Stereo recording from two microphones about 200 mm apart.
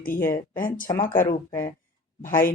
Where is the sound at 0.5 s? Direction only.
45° left (ahead or behind).